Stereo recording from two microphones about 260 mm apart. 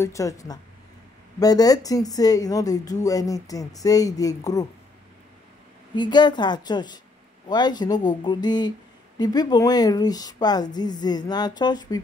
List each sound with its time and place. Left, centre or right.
0.0 s a woman's voice: centre
5.9 s a woman's voice: centre